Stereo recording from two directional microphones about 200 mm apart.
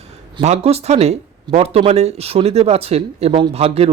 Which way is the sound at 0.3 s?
30° right (ahead or behind).